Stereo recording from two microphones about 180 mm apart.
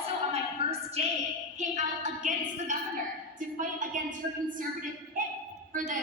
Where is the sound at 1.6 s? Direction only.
40° right (ahead or behind).